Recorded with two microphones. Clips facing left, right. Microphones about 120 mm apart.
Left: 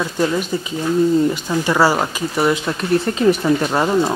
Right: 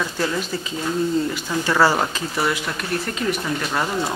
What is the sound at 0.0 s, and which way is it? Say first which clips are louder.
Speech: left 5 dB; 15° left (ahead or behind).